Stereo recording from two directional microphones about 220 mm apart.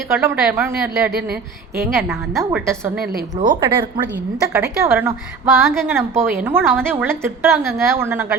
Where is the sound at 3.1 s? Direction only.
35° right (ahead or behind).